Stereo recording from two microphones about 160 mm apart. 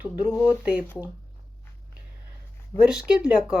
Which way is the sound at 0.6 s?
5° right (ahead or behind).